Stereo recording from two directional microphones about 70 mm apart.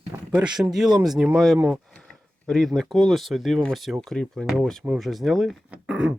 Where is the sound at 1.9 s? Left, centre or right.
Centre.